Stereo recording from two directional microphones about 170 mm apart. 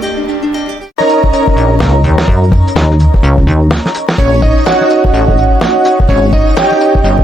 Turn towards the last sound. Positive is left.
turn(degrees=0)  # may be behind; listen again after turning